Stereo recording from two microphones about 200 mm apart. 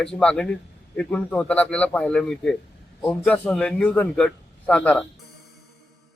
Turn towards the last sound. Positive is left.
turn(degrees=5)  # may be behind; listen again after turning